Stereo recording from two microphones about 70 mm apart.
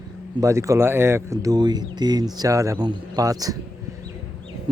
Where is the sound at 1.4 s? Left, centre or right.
Right.